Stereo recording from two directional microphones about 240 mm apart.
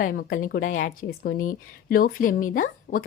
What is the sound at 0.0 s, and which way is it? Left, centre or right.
A woman's voice, left.